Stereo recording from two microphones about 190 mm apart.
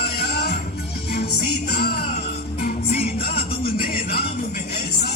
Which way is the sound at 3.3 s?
50° left (ahead or behind).